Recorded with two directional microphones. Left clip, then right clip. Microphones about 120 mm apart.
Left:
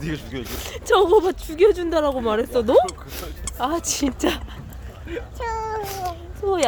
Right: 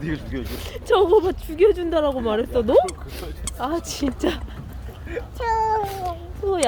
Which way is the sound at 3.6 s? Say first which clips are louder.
Left 2 dB; 40° left (ahead or behind).